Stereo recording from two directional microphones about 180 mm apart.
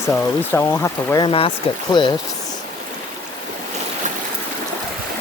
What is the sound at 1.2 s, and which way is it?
Speech, 30° left (ahead or behind).